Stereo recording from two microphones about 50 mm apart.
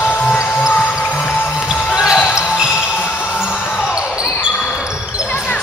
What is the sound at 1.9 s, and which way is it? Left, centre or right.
Basketball bounce, centre.